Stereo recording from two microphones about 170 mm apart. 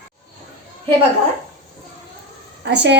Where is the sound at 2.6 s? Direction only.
90° right.